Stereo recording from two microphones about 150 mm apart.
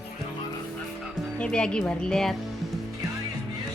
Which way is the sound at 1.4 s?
5° left (ahead or behind).